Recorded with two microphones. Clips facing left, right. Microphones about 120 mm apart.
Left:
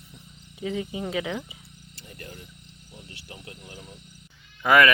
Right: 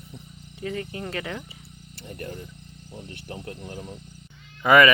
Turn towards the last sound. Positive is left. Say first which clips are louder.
# right 2 dB
turn(degrees=0)  # may be behind; listen again after turning